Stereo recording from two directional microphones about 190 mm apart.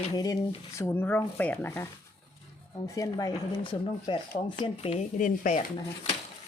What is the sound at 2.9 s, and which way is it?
Speech, 20° left (ahead or behind).